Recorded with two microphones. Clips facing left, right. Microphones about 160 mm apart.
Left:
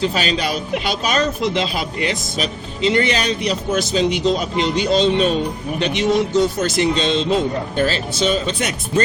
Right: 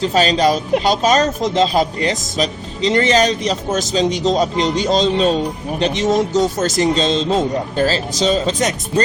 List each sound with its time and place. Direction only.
0.1 s speech: 35° right (ahead or behind)